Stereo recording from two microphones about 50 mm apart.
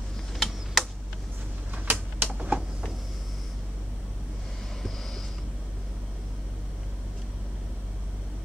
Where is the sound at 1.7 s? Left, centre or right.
Right.